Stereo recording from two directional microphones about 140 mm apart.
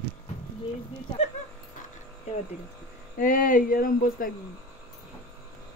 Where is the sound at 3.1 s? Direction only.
80° left.